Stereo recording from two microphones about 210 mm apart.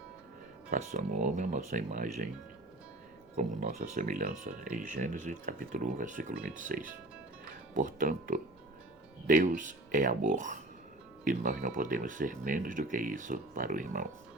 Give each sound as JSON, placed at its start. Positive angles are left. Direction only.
{"t": 0.9, "sound": "speech", "side_deg": -35}
{"t": 3.3, "sound": "speech", "side_deg": -40}